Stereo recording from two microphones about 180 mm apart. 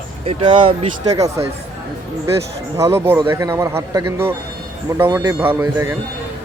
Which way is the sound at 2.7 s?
15° right (ahead or behind).